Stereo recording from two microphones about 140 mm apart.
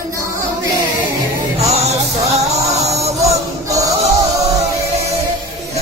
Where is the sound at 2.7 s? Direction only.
50° right (ahead or behind).